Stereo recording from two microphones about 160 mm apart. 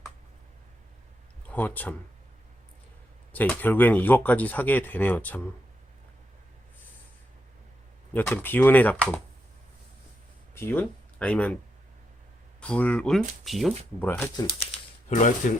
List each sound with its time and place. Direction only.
1.5 s speech: 10° left (ahead or behind)
3.3 s speech: 10° left (ahead or behind)
8.1 s speech: 10° left (ahead or behind)
10.5 s speech: 15° left (ahead or behind)
12.5 s speech: 5° left (ahead or behind)
14.1 s speech: 15° left (ahead or behind)
14.6 s speech: 45° left (ahead or behind)